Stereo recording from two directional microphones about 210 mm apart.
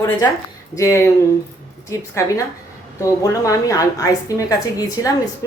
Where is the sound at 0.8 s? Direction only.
15° left (ahead or behind).